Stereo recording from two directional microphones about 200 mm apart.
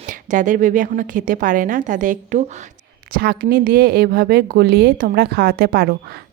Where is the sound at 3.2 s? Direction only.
50° right (ahead or behind).